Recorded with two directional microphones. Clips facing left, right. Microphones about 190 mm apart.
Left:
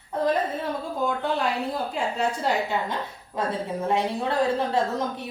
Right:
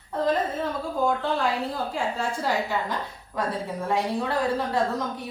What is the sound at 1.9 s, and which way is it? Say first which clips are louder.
A woman's voice: left 2 dB; 20° left (ahead or behind).